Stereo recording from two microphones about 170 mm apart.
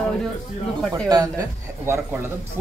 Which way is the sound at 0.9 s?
20° right (ahead or behind).